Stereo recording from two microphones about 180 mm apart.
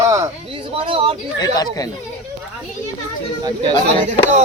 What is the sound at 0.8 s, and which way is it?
Speech, 30° right (ahead or behind).